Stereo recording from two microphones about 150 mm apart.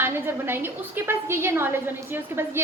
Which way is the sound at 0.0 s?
15° right (ahead or behind).